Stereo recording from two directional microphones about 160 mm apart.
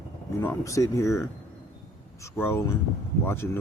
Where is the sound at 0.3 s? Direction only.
20° left (ahead or behind).